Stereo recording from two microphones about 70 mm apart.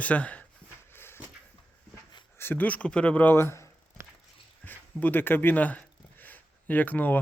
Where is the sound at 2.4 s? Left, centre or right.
Left.